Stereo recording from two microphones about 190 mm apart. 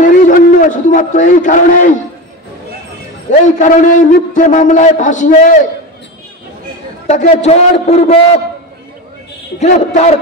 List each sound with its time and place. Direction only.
0.3 s a man's voice: 40° left (ahead or behind)
3.3 s a man's voice: 40° left (ahead or behind)
7.1 s a man's voice: 35° left (ahead or behind)
9.6 s a man's voice: 35° left (ahead or behind)